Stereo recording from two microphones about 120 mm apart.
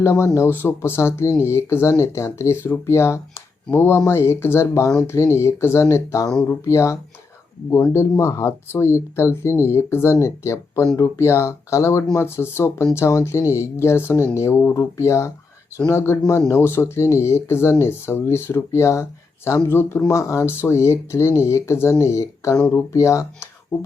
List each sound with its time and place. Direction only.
0.0 s speech: 20° left (ahead or behind)